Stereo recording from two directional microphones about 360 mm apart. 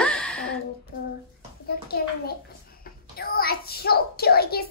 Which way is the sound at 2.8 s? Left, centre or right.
Left.